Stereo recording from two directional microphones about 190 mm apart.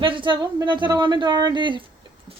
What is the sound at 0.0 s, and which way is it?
Speech, 25° right (ahead or behind).